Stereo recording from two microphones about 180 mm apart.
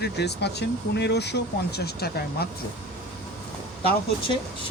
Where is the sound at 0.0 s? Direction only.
70° left (ahead or behind).